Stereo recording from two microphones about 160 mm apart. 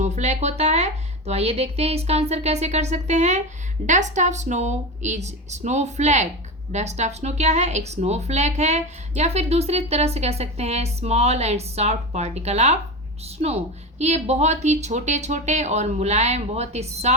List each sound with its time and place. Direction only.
0.0 s speech: 45° right (ahead or behind)
14.0 s speech: 45° right (ahead or behind)